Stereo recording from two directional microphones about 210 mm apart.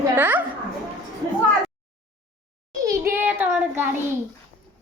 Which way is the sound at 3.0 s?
10° right (ahead or behind).